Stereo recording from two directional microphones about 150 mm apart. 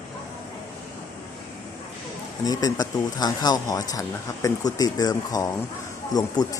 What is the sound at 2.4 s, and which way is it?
Speech, 25° left (ahead or behind).